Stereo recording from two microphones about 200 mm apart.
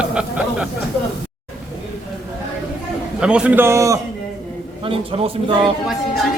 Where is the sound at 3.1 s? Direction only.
5° right (ahead or behind).